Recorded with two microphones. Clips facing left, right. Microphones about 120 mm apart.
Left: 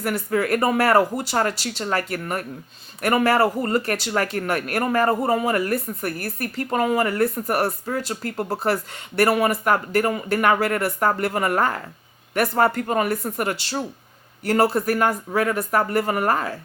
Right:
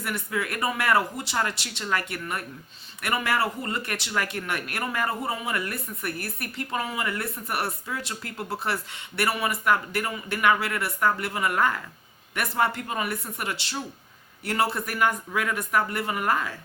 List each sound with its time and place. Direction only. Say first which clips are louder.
0.0 s speech: left 7 dB; 40° left (ahead or behind)